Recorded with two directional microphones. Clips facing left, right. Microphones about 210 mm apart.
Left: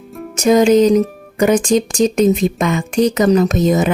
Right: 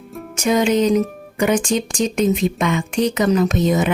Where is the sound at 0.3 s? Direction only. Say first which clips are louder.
Left 6 dB; 40° left (ahead or behind).